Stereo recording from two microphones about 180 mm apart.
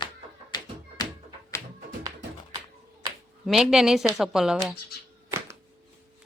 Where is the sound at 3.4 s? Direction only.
Centre (ahead or behind).